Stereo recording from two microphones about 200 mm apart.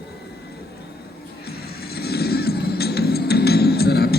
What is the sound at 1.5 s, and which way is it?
Music, 50° left (ahead or behind).